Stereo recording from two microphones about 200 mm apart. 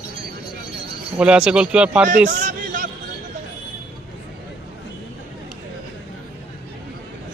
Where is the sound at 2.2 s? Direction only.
45° right (ahead or behind).